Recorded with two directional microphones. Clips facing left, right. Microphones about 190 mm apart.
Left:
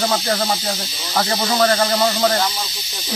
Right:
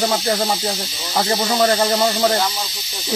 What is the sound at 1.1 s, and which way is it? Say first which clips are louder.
Speech: right 1 dB; 20° right (ahead or behind).